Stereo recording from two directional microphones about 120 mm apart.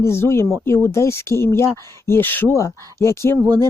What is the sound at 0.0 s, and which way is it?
Speech, 20° left (ahead or behind).